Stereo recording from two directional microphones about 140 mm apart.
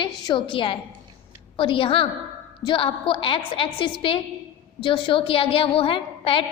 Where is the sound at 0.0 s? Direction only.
35° left (ahead or behind).